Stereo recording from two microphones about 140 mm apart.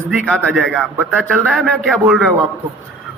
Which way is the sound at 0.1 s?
Centre (ahead or behind).